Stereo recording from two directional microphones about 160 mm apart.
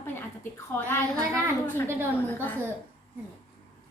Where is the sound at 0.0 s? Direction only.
15° left (ahead or behind).